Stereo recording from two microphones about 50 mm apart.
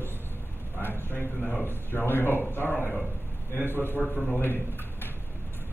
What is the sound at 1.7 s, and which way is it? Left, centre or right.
A man's voice, left.